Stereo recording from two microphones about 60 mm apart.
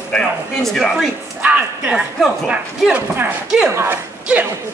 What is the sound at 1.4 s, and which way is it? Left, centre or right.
Speech, right.